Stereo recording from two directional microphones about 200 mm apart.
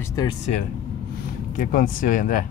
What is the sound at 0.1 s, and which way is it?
Speech, 20° left (ahead or behind).